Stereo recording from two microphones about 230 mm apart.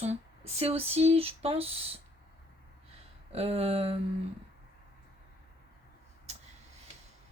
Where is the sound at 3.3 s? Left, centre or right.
Right.